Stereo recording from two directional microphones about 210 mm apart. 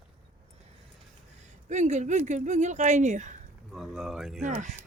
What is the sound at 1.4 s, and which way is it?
Speech, 35° right (ahead or behind).